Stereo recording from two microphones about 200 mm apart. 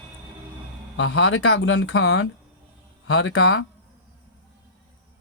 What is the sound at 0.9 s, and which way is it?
Speech, 75° left (ahead or behind).